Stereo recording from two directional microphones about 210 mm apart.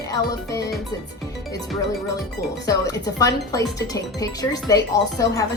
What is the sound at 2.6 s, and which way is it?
Speech, 15° left (ahead or behind).